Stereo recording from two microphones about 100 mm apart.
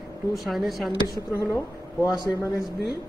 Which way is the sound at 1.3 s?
30° left (ahead or behind).